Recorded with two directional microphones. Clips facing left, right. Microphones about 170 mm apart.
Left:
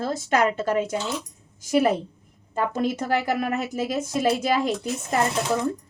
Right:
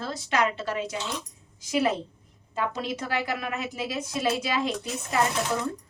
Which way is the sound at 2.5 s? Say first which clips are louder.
Left 5 dB; 45° left (ahead or behind).